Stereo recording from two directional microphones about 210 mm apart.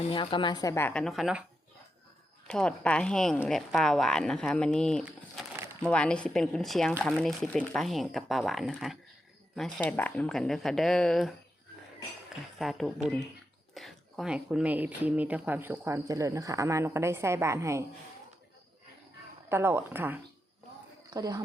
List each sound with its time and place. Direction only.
0.1 s speech: 25° left (ahead or behind); by 1.5 s 5° right (ahead or behind)
2.5 s speech: 5° left (ahead or behind)
5.0 s a sound: 5° right (ahead or behind)
5.8 s speech: 5° left (ahead or behind)
12.5 s speech: centre (ahead or behind)
19.5 s speech: 10° right (ahead or behind)